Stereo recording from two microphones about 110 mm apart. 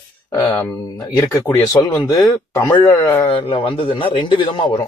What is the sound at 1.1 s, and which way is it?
Speech, 30° left (ahead or behind).